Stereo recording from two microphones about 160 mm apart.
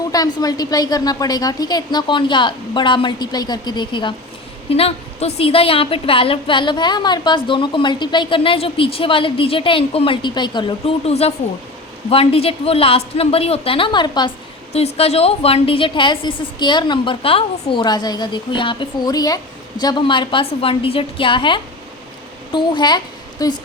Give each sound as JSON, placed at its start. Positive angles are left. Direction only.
{"t": 0.1, "sound": "a woman's voice", "side_deg": 25}
{"t": 14.7, "sound": "a woman's voice", "side_deg": 40}